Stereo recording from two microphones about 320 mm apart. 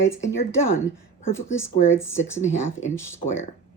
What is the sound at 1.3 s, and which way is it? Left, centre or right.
Speech, centre.